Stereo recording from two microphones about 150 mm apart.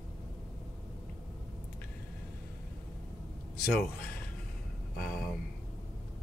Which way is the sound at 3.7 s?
5° left (ahead or behind).